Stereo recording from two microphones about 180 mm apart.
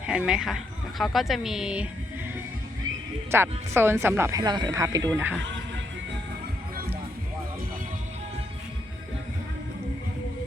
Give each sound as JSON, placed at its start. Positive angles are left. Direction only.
{"t": 0.1, "sound": "speech", "side_deg": -5}
{"t": 3.3, "sound": "speech", "side_deg": -15}